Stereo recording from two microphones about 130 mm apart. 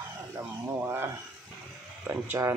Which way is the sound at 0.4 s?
15° right (ahead or behind).